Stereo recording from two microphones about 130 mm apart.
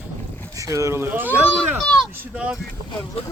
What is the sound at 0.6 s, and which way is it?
Speech, 25° right (ahead or behind).